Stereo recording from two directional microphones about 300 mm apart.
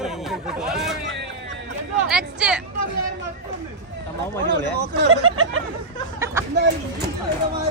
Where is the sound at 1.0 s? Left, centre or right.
Right.